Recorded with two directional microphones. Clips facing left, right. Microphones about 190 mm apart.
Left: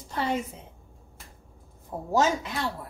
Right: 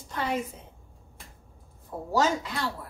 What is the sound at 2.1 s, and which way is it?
Speech, 20° left (ahead or behind).